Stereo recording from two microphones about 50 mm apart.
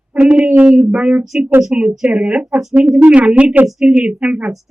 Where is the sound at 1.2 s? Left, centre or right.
Centre.